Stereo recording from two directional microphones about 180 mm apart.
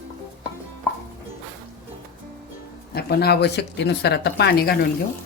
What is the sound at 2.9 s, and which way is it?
Speech, 60° left (ahead or behind).